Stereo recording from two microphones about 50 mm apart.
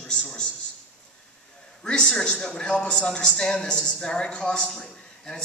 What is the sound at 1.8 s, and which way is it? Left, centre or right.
A man's voice, centre.